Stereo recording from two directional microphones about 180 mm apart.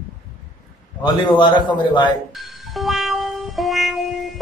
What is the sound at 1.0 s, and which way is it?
A man's voice, 25° left (ahead or behind).